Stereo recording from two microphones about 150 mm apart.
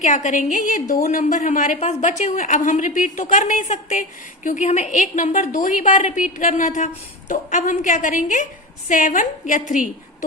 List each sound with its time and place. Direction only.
0.0 s a woman's voice: 55° left (ahead or behind)